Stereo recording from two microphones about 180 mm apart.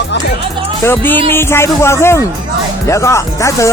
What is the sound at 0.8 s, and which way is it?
Speech, 10° left (ahead or behind).